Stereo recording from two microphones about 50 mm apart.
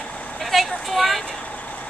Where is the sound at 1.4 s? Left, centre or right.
Left.